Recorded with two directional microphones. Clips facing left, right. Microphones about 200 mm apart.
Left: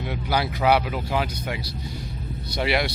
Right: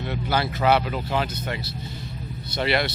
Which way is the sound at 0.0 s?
10° left (ahead or behind).